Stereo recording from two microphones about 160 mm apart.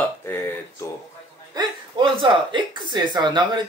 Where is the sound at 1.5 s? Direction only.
30° right (ahead or behind).